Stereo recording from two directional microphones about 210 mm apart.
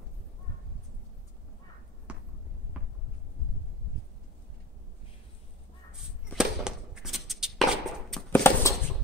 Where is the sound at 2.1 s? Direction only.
5° right (ahead or behind).